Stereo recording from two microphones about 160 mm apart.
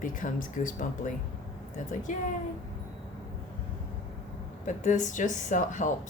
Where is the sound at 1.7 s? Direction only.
55° left (ahead or behind).